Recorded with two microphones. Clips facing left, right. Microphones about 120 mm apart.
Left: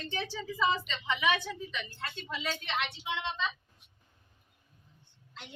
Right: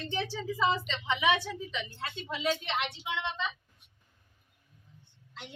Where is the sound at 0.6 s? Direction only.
25° right (ahead or behind).